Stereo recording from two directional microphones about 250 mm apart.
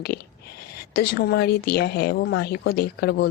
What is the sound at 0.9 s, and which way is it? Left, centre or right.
Speech, left.